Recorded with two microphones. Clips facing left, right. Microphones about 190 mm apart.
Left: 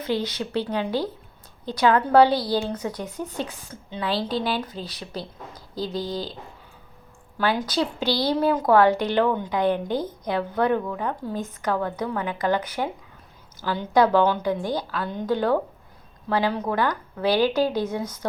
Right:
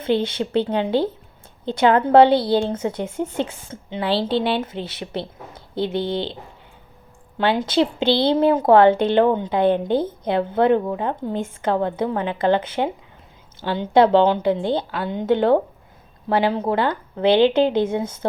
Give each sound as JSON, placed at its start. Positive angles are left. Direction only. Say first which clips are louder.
{"t": 0.0, "sound": "a woman's voice", "louder": "right 5 dB", "side_deg": -25}
{"t": 7.3, "sound": "a woman's voice", "louder": "right 5 dB", "side_deg": -25}